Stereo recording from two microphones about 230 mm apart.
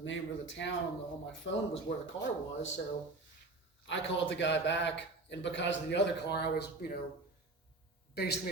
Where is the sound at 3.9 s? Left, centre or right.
Left.